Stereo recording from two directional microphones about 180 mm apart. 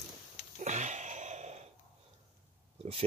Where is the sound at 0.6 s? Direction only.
40° right (ahead or behind).